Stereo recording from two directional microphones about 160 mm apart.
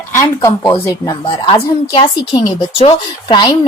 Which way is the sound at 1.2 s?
35° left (ahead or behind).